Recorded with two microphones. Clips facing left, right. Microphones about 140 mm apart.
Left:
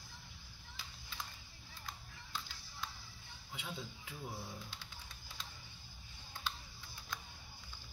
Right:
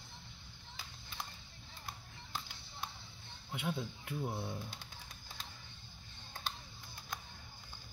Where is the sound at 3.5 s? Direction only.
60° right (ahead or behind).